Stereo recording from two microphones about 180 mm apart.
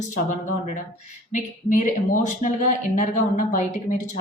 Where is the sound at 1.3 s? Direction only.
45° left (ahead or behind).